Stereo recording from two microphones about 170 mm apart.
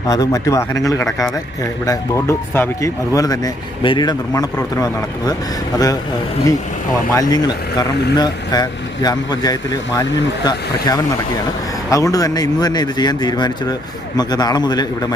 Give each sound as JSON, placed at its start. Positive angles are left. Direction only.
{"t": 0.1, "sound": "speech", "side_deg": 20}
{"t": 7.1, "sound": "speech", "side_deg": 20}